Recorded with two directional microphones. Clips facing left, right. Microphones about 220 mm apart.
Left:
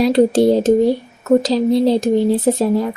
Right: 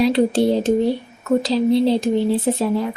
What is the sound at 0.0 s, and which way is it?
Speech, 45° left (ahead or behind).